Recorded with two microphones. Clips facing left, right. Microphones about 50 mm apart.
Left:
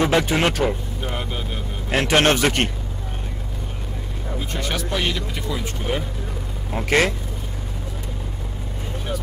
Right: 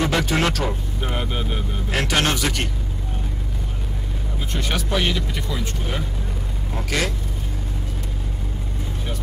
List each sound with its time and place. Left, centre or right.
0.0 s speech: centre
1.0 s speech: centre
1.9 s a man's voice: left
4.6 s speech: centre
6.9 s a man's voice: left